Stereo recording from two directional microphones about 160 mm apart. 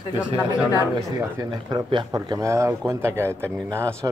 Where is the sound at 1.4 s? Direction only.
25° right (ahead or behind).